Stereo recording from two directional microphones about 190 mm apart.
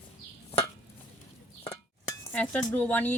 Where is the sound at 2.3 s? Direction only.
10° left (ahead or behind).